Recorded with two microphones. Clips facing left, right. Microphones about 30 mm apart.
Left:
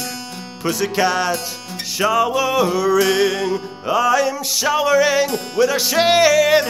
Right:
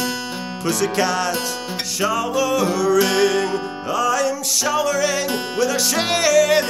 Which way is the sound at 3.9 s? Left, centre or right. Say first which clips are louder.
Left 3 dB; centre.